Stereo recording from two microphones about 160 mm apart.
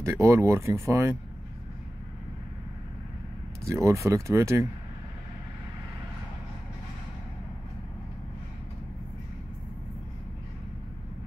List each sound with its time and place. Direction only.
0.0 s speech: 15° right (ahead or behind)
3.6 s speech: 15° right (ahead or behind)